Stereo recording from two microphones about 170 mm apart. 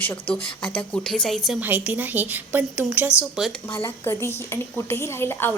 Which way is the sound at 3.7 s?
15° left (ahead or behind).